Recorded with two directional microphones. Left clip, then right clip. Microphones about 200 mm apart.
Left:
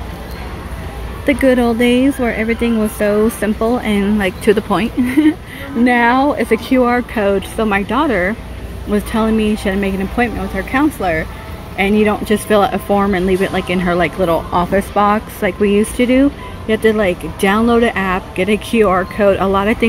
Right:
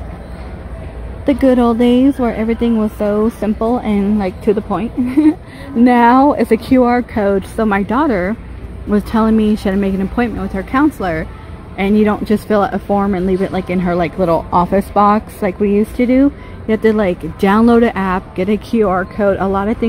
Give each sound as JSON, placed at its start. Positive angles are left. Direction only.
{"t": 1.2, "sound": "speech", "side_deg": -15}
{"t": 5.9, "sound": "speech", "side_deg": -20}
{"t": 8.9, "sound": "speech", "side_deg": -20}